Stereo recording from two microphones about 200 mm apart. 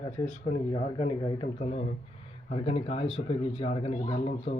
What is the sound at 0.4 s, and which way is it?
Speech, 35° left (ahead or behind).